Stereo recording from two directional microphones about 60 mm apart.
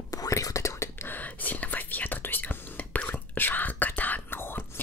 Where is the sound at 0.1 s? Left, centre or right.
Left.